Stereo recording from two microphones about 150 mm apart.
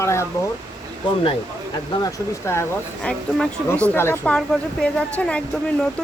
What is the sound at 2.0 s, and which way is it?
Speech, 20° left (ahead or behind).